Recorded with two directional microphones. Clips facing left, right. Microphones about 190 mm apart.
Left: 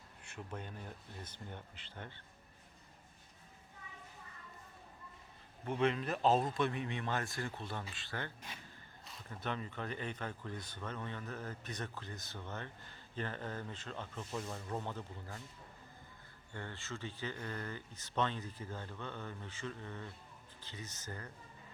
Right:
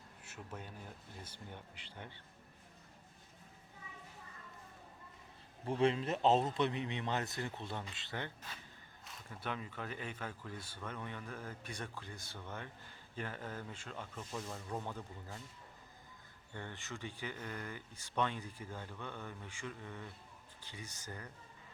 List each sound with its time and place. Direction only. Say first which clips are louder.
0.2 s speech: left 3 dB; 5° right (ahead or behind)
5.8 s speech: right 1 dB; 25° right (ahead or behind)
9.0 s speech: left 2 dB; 5° right (ahead or behind)
16.6 s speech: left 1 dB; 15° right (ahead or behind)